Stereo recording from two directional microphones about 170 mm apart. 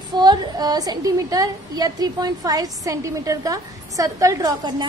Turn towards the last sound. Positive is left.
turn(degrees=-20)  # may be behind; listen again after turning